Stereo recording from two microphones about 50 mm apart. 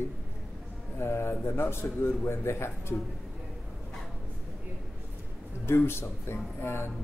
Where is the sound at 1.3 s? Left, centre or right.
Left.